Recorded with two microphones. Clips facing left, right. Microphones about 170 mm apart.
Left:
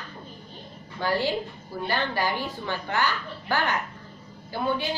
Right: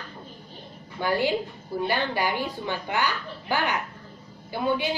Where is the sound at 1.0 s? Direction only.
15° right (ahead or behind).